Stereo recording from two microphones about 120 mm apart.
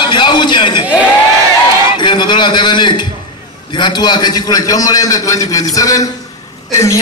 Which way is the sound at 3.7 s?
40° left (ahead or behind).